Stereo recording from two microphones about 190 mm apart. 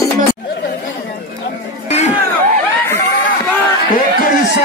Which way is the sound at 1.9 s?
35° left (ahead or behind).